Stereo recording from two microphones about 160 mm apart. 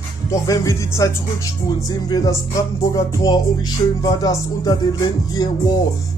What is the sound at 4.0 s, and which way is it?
Music, 25° left (ahead or behind).